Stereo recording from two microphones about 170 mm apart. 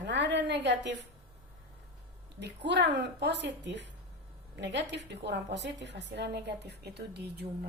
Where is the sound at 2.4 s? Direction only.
90° right.